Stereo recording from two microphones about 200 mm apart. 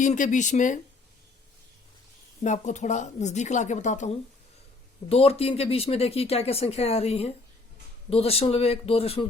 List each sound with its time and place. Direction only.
0.0 s a woman's voice: 40° left (ahead or behind)
2.4 s a woman's voice: 35° left (ahead or behind)